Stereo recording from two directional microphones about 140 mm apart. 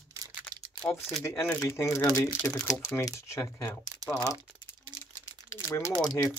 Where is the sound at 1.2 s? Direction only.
15° left (ahead or behind).